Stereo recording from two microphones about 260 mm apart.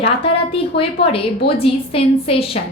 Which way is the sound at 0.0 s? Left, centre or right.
Left.